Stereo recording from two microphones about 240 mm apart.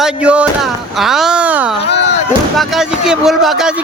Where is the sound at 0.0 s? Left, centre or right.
Centre.